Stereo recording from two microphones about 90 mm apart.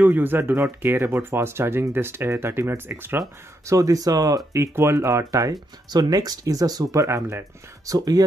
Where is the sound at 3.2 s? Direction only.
40° right (ahead or behind).